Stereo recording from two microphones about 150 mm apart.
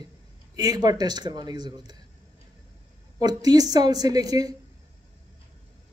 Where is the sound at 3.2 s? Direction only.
25° right (ahead or behind).